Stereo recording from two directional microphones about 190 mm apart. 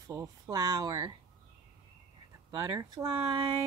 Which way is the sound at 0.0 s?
20° right (ahead or behind).